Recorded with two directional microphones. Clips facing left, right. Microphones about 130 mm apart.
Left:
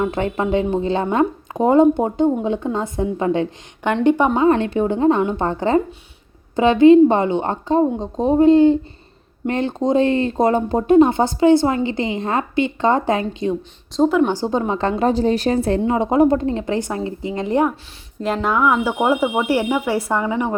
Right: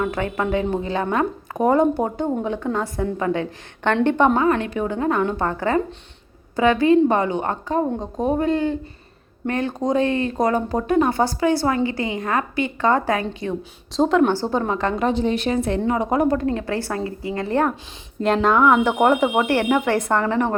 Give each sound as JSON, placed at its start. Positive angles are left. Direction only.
{"t": 0.0, "sound": "speech", "side_deg": 25}
{"t": 3.8, "sound": "speech", "side_deg": 10}
{"t": 4.4, "sound": "speech", "side_deg": 30}
{"t": 13.9, "sound": "speech", "side_deg": 0}
{"t": 14.3, "sound": "a woman's voice", "side_deg": 15}
{"t": 15.9, "sound": "speech", "side_deg": 25}
{"t": 18.2, "sound": "speech", "side_deg": 5}